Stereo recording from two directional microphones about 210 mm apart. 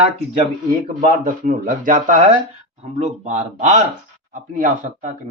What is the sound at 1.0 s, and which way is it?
Speech, 40° right (ahead or behind).